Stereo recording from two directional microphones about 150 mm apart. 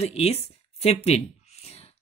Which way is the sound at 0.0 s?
45° left (ahead or behind).